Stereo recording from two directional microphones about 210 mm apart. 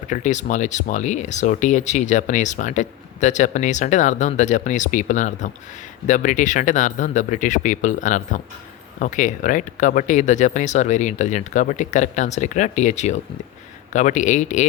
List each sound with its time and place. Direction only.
0.1 s speech: 35° left (ahead or behind)